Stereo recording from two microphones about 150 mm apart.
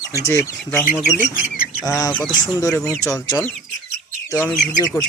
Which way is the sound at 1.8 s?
20° left (ahead or behind).